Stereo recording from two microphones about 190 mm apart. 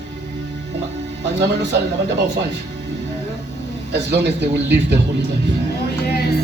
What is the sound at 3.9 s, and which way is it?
Speech, 65° right (ahead or behind).